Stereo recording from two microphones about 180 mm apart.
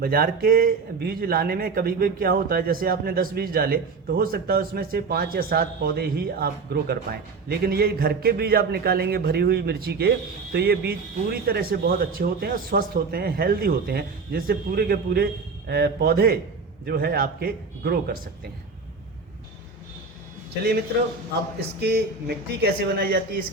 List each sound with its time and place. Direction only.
0.0 s a man's voice: 55° right (ahead or behind)
21.8 s a man's voice: 65° right (ahead or behind)